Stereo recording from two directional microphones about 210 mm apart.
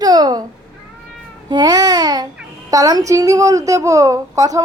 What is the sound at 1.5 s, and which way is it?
A woman's voice, 20° right (ahead or behind).